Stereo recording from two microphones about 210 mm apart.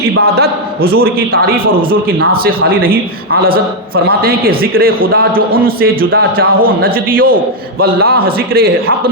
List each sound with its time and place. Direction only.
0.2 s a man's voice: 50° right (ahead or behind)